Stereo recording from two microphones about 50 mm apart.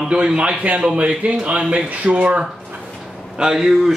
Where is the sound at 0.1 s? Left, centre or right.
Right.